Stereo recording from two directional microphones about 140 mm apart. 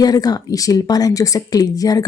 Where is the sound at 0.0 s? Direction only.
25° left (ahead or behind).